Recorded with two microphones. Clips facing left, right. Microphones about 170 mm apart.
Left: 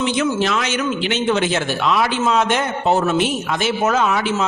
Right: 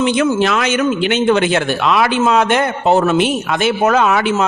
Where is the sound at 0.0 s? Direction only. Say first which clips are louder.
Right 5 dB; 60° right (ahead or behind).